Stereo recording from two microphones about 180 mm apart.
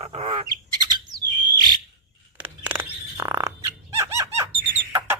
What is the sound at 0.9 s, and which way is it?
Bird, 25° right (ahead or behind).